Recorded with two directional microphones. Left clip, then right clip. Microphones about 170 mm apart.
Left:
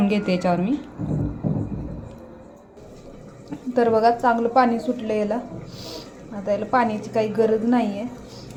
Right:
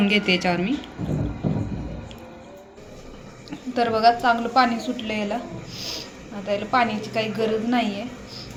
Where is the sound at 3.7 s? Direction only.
60° left (ahead or behind).